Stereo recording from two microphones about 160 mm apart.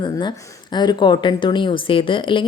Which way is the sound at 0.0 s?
25° left (ahead or behind).